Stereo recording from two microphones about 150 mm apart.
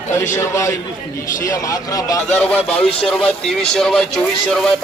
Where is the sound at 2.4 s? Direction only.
10° left (ahead or behind).